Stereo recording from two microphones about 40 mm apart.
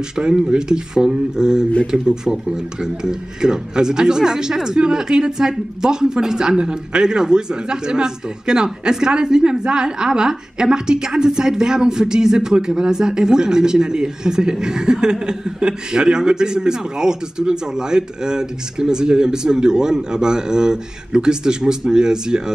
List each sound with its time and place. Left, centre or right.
0.1 s speech: centre